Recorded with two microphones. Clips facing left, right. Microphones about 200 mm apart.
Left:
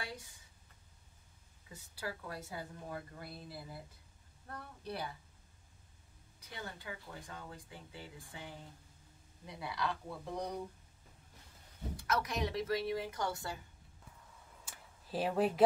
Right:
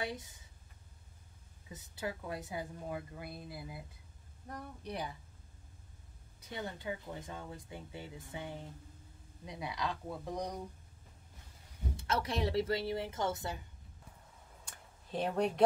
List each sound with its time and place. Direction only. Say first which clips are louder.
0.0 s speech: right 6 dB; 20° right (ahead or behind)
1.7 s a woman's voice: right 3 dB; 20° right (ahead or behind)
6.5 s speech: right 6 dB; 20° right (ahead or behind)
12.0 s speech: right 1 dB; 30° right (ahead or behind)
14.6 s a sound: even; 5° left (ahead or behind)